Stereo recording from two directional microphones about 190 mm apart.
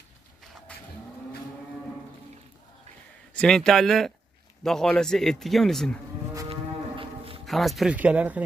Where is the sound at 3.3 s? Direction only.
5° left (ahead or behind).